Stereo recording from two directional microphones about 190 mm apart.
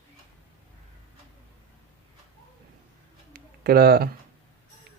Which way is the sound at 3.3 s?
50° right (ahead or behind).